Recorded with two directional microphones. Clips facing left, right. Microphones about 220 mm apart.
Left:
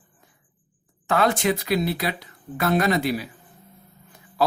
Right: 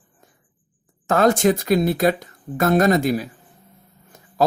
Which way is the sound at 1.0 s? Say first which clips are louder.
Right 5 dB; 45° right (ahead or behind).